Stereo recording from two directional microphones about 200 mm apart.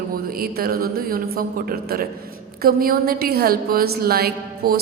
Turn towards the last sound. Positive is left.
turn(degrees=-50)  # may be behind; listen again after turning